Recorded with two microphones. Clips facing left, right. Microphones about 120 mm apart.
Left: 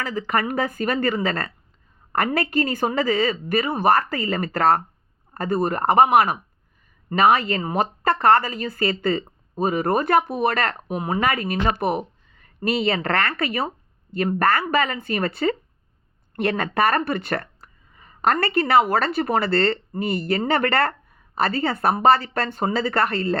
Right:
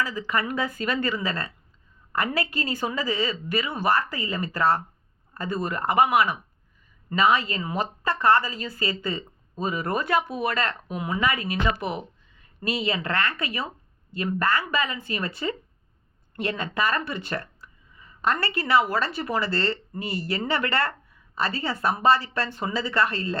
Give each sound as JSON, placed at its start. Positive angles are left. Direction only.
{"t": 0.0, "sound": "speech", "side_deg": 55}